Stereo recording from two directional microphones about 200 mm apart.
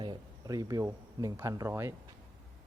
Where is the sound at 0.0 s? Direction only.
20° right (ahead or behind).